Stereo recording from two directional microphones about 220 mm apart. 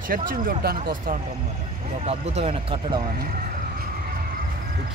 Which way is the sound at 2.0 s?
30° right (ahead or behind).